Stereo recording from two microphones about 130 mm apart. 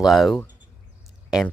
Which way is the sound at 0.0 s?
Centre (ahead or behind).